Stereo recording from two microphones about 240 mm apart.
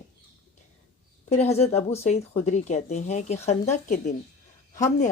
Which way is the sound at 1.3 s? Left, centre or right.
Left.